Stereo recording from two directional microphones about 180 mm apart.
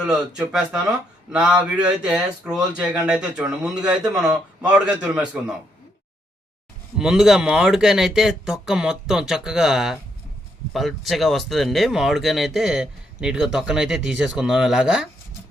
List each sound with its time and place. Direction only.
0.1 s a man's voice: 5° right (ahead or behind)
7.0 s speech: centre (ahead or behind)